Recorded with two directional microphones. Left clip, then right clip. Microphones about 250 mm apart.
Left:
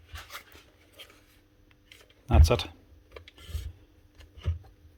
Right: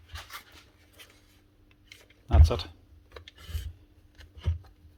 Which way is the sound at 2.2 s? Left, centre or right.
Left.